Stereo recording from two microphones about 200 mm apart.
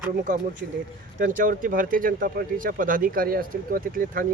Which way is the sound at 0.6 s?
55° right (ahead or behind).